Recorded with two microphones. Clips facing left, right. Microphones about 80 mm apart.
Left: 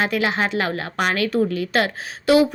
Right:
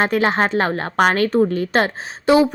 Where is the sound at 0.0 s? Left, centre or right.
Right.